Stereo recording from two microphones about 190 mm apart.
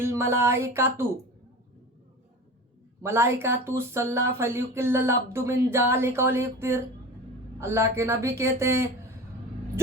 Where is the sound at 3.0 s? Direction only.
15° right (ahead or behind).